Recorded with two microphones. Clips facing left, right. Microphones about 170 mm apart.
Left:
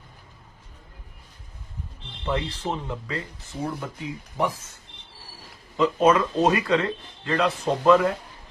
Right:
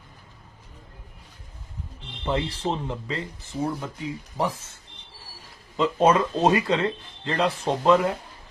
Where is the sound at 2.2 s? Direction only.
30° right (ahead or behind).